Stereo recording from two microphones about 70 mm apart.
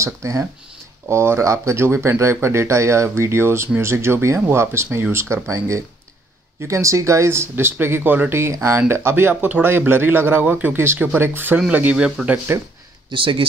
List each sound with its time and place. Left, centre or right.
0.0 s speech: right
12.2 s speech: centre
13.1 s speech: right